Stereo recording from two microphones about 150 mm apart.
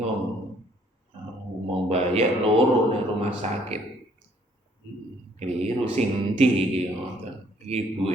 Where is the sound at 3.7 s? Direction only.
45° right (ahead or behind).